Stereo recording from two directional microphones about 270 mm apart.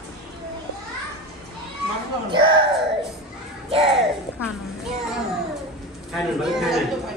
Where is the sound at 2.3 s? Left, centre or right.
Centre.